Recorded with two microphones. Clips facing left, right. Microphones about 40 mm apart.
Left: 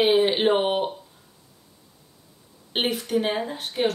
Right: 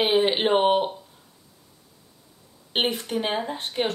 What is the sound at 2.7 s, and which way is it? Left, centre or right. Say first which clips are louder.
Speech: even; right.